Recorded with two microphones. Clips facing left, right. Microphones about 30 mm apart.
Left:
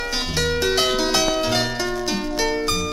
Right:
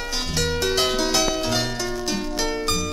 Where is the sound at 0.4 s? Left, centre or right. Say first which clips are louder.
Left 2 dB; centre.